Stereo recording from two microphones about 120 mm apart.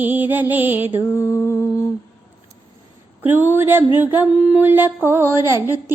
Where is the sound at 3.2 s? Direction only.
15° right (ahead or behind).